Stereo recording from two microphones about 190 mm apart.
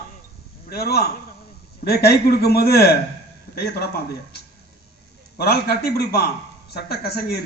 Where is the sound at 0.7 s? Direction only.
55° left (ahead or behind).